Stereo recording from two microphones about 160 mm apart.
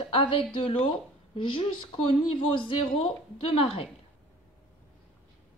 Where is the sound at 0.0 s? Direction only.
35° left (ahead or behind).